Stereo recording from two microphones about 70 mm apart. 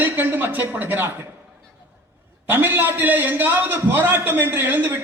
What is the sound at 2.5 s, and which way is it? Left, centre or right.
A man's voice, right.